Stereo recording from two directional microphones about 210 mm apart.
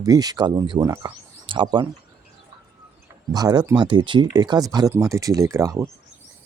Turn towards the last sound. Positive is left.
turn(degrees=-15)  # may be behind; listen again after turning